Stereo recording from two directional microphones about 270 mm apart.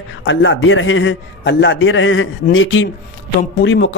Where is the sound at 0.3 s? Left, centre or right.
Left.